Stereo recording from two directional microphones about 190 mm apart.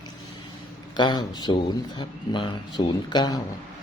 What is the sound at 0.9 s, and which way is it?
Speech, 25° left (ahead or behind).